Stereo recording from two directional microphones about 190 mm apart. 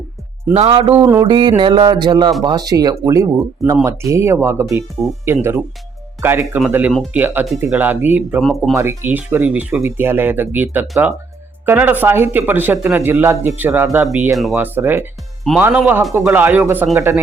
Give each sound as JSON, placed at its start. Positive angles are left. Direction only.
{"t": 0.5, "sound": "music", "side_deg": -30}
{"t": 1.2, "sound": "mantra", "side_deg": -25}
{"t": 4.1, "sound": "speech", "side_deg": -15}
{"t": 8.4, "sound": "speech", "side_deg": 0}
{"t": 8.7, "sound": "speech", "side_deg": -15}